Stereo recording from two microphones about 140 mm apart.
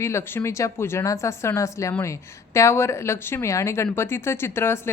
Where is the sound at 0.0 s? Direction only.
20° left (ahead or behind).